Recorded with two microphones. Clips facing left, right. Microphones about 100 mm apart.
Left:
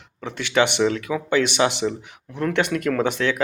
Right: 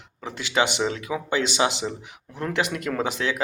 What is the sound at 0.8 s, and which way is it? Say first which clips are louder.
Speech: left 5 dB; 20° right (ahead or behind).